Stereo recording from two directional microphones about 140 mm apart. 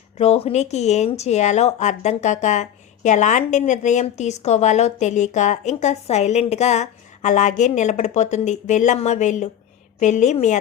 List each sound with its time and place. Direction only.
0.2 s speech: 45° left (ahead or behind)